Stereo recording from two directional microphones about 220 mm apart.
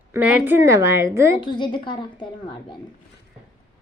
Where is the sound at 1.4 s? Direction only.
20° left (ahead or behind).